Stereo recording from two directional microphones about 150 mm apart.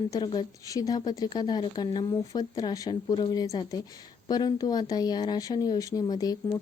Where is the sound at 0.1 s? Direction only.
25° left (ahead or behind).